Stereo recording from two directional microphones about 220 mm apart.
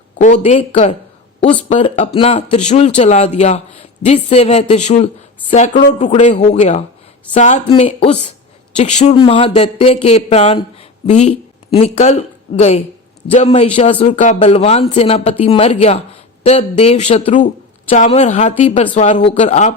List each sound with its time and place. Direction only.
0.2 s speech: 30° left (ahead or behind)